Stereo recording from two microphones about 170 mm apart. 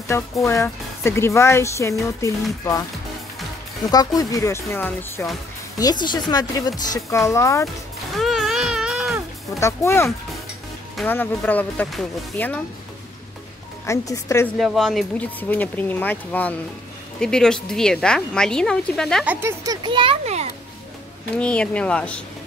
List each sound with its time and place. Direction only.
0.1 s speech: 15° left (ahead or behind)
3.9 s speech: 20° left (ahead or behind)
7.6 s music: centre (ahead or behind)
9.6 s speech: 15° left (ahead or behind)
13.8 s speech: 20° left (ahead or behind)
14.6 s speech: centre (ahead or behind)
19.2 s speech: 15° right (ahead or behind); by 20.4 s 35° right (ahead or behind)
21.4 s speech: 5° left (ahead or behind)